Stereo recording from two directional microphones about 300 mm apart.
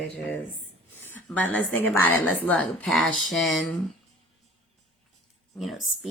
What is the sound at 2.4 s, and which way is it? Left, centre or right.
Speech, centre.